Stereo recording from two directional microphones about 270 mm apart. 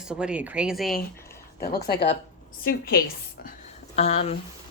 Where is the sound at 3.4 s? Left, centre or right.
Left.